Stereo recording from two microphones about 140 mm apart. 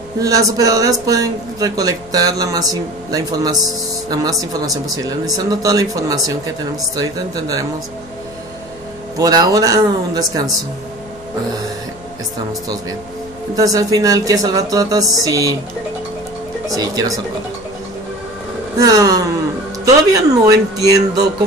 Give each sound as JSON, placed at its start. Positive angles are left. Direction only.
{"t": 0.2, "sound": "speech", "side_deg": -25}
{"t": 9.2, "sound": "speech", "side_deg": -25}
{"t": 13.6, "sound": "speech", "side_deg": -25}
{"t": 16.6, "sound": "speech", "side_deg": -25}
{"t": 18.8, "sound": "speech", "side_deg": -25}